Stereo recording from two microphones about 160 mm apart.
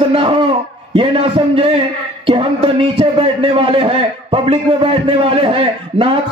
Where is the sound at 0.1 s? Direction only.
35° right (ahead or behind).